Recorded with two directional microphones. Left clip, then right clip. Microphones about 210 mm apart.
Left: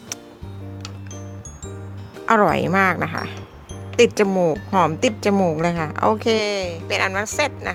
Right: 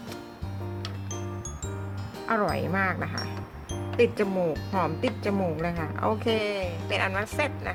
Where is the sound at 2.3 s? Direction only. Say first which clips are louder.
Left 10 dB; 50° left (ahead or behind).